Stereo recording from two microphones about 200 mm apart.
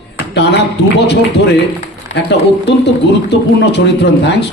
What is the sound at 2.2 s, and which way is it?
A man's voice, 60° left (ahead or behind).